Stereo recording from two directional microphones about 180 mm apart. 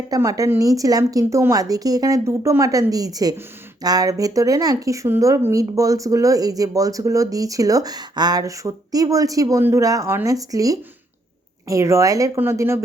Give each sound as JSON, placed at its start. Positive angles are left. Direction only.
{"t": 0.1, "sound": "speech", "side_deg": -20}